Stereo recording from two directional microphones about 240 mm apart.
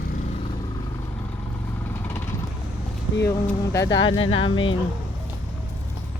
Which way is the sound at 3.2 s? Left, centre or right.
Centre.